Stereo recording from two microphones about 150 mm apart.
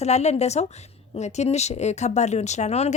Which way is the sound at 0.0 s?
50° left (ahead or behind).